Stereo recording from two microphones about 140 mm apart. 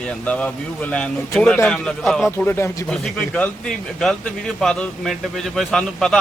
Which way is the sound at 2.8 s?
5° left (ahead or behind).